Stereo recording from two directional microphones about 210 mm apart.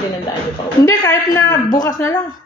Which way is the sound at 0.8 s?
15° left (ahead or behind).